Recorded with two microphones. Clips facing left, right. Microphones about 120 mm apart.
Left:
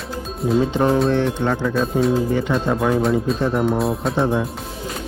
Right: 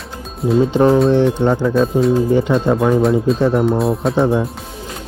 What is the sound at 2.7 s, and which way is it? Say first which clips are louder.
Speech: right 4 dB; centre (ahead or behind).